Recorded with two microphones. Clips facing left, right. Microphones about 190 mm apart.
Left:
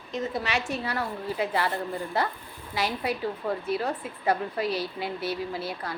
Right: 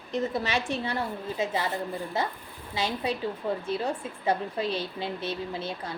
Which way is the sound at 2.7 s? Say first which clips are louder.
Left 1 dB; 20° right (ahead or behind).